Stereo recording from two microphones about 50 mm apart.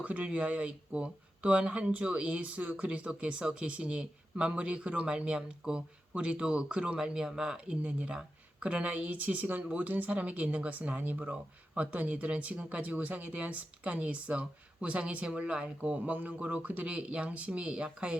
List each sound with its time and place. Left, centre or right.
0.0 s speech: right
7.8 s speech: right